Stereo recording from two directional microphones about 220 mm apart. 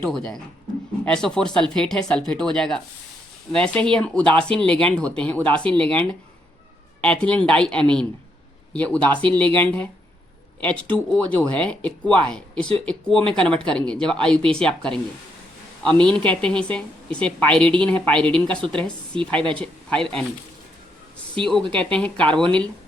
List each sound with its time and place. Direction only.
0.0 s a woman's voice: 5° left (ahead or behind)
16.0 s a woman's voice: 5° left (ahead or behind)
21.3 s a woman's voice: 5° left (ahead or behind)